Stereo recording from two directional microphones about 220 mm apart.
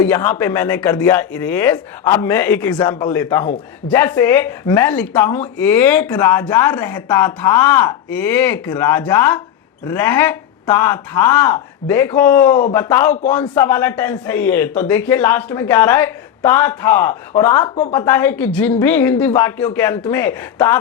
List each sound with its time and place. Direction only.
0.0 s speech: 10° left (ahead or behind)
12.5 s a man's voice: 35° left (ahead or behind)
12.7 s speech: 15° left (ahead or behind)